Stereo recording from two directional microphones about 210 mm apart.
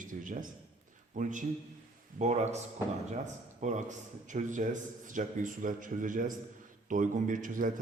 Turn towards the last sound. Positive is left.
turn(degrees=-40)  # may be behind; listen again after turning